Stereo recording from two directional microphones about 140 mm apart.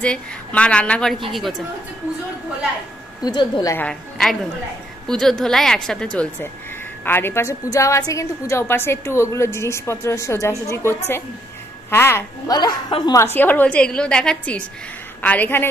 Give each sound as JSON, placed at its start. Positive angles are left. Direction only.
{"t": 0.0, "sound": "a woman's voice", "side_deg": 10}
{"t": 3.3, "sound": "a woman's voice", "side_deg": 30}
{"t": 5.0, "sound": "a woman's voice", "side_deg": 5}
{"t": 7.1, "sound": "a woman's voice", "side_deg": 15}
{"t": 12.4, "sound": "a woman's voice", "side_deg": 30}
{"t": 13.2, "sound": "a woman's voice", "side_deg": 15}